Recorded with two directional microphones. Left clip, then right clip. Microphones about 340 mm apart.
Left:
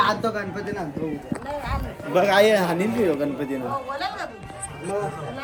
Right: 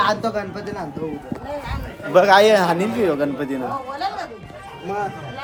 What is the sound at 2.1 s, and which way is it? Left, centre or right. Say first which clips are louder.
A man's voice: right 5 dB; centre.